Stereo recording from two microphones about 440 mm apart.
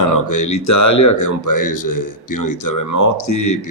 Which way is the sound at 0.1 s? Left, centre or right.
Left.